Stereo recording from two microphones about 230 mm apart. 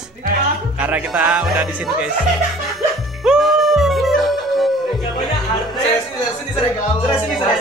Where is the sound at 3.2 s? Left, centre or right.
Centre.